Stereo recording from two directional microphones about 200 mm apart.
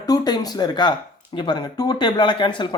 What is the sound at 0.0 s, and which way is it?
Speech, 20° left (ahead or behind).